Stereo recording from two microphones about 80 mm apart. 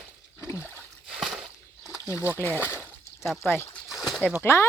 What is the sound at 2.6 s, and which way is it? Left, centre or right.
Speech, right.